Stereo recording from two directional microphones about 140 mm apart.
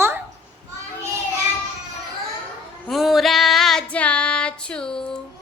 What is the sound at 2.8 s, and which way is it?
Child singing, centre (ahead or behind).